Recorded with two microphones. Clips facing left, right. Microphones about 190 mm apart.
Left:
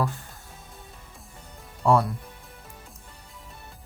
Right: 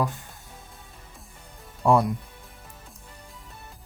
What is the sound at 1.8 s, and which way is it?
Speech, 15° right (ahead or behind).